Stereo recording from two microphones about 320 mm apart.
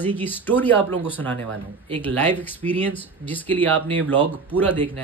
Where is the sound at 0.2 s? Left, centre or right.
Centre.